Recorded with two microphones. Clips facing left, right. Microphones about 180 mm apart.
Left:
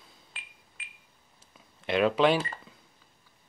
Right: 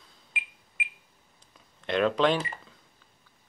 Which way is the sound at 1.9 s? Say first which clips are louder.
Left 1 dB; 5° left (ahead or behind).